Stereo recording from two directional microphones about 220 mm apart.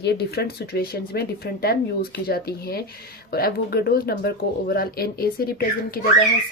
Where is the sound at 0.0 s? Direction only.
45° left (ahead or behind).